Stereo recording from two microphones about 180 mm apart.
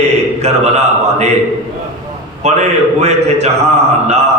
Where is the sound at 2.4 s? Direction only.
40° right (ahead or behind).